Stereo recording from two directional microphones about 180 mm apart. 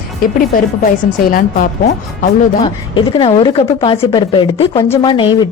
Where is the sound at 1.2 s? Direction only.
50° left (ahead or behind).